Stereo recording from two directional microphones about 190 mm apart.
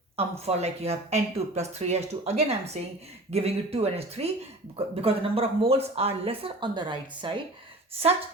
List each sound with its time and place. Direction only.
0.2 s speech: 35° right (ahead or behind)